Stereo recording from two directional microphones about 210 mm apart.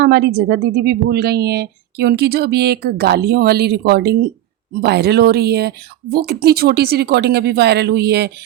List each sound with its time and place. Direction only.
0.0 s a woman's voice: 50° right (ahead or behind)